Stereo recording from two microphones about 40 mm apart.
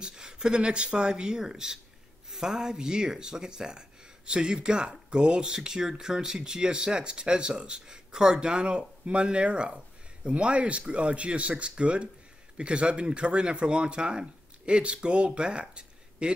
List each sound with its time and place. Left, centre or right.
0.0 s speech: centre